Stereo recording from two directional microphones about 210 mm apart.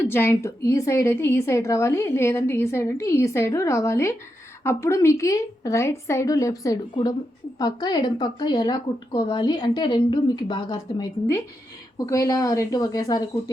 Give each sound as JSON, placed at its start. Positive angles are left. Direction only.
{"t": 0.0, "sound": "a woman's voice", "side_deg": 10}